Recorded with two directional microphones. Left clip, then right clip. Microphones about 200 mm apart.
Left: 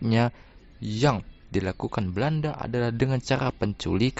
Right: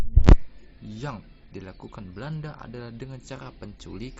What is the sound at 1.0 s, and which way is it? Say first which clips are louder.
Speech: left 13 dB; 50° left (ahead or behind).